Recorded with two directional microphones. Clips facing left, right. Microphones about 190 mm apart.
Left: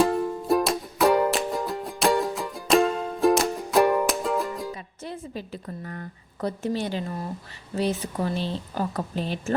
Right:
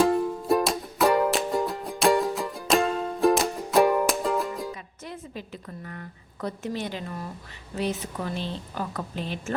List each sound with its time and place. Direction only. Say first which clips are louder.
0.0 s music: even; centre (ahead or behind)
5.0 s a woman's voice: left 3 dB; 35° left (ahead or behind)